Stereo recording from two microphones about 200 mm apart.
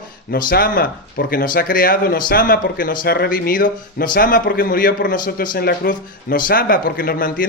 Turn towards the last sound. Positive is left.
turn(degrees=45)  # may be behind; listen again after turning